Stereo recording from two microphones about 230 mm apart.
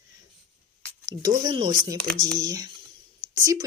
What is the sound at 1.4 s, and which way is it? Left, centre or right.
Speech, centre.